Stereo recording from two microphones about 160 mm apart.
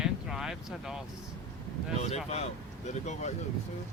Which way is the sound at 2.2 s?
40° left (ahead or behind).